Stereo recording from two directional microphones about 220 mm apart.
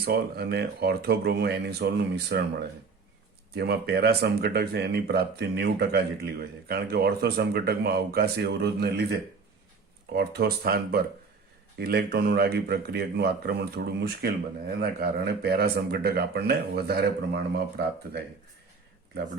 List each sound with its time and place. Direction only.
0.0 s speech: 45° right (ahead or behind)
3.5 s speech: 45° right (ahead or behind)
10.1 s speech: 45° right (ahead or behind)